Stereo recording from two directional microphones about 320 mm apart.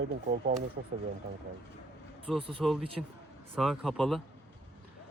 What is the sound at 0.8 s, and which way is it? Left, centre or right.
Speech, right.